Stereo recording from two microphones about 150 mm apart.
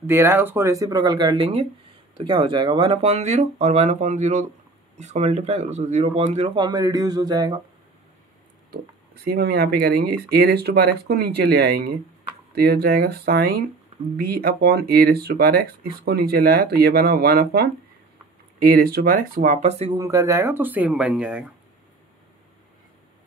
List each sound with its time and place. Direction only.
0.0 s speech: 15° right (ahead or behind); by 6.5 s 45° right (ahead or behind)
6.5 s speech: 30° right (ahead or behind)
9.2 s speech: 90° right
18.6 s speech: 80° right; by 19.9 s 45° right (ahead or behind)
19.9 s speech: 25° right (ahead or behind); by 21.5 s 5° right (ahead or behind)